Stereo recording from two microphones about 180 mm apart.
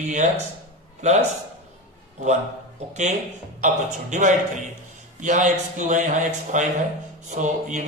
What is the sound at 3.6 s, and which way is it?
A man's voice, 45° right (ahead or behind).